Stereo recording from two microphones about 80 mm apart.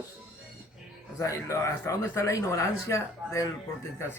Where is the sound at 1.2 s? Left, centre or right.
Left.